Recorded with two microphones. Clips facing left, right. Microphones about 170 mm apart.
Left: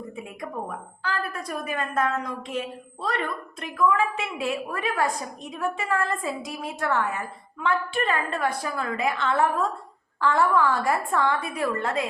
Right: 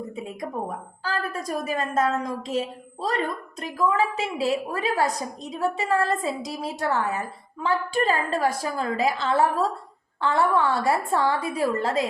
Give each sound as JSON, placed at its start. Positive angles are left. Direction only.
{"t": 1.5, "sound": "a woman's voice", "side_deg": -40}